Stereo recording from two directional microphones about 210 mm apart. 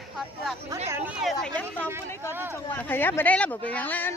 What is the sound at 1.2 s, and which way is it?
A woman's voice, centre (ahead or behind).